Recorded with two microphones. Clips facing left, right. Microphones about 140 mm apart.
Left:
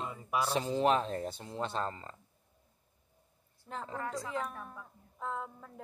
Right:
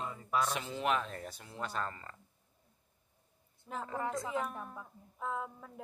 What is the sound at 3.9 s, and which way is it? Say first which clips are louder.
Speech: right 2 dB; 20° right (ahead or behind).